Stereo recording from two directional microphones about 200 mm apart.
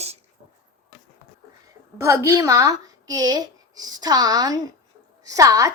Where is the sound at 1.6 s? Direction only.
15° right (ahead or behind).